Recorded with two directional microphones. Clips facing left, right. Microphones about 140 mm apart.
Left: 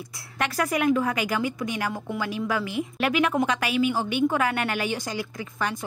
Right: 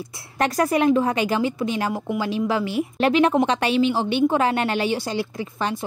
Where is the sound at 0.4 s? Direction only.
35° right (ahead or behind).